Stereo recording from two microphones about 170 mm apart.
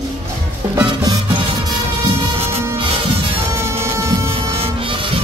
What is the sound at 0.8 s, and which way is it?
Music, 25° right (ahead or behind).